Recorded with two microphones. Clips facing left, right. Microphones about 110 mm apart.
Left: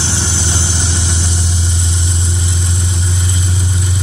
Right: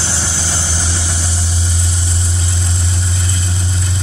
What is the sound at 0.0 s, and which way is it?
Vehicle, 20° left (ahead or behind).